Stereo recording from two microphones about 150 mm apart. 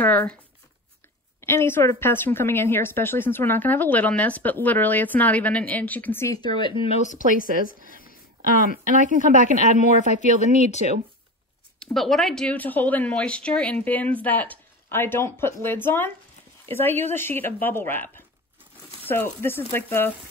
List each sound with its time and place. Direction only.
0.0 s speech: 10° left (ahead or behind)
1.4 s speech: 15° left (ahead or behind); by 7.0 s 35° left (ahead or behind)
7.2 s a woman's voice: 65° right (ahead or behind)
10.6 s speech: 50° left (ahead or behind)
11.8 s speech: centre (ahead or behind)